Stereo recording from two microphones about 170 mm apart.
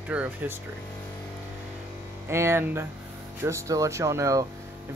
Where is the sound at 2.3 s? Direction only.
15° right (ahead or behind).